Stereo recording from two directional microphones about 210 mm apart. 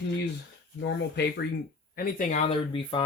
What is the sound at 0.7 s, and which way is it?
Speech, 55° left (ahead or behind).